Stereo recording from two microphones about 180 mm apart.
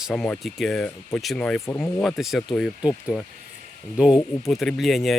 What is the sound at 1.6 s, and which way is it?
Speech, 15° left (ahead or behind).